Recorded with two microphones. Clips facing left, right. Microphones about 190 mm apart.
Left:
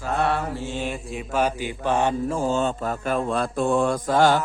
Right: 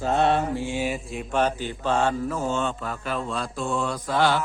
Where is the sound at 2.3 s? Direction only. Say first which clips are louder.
Left 3 dB; 35° left (ahead or behind).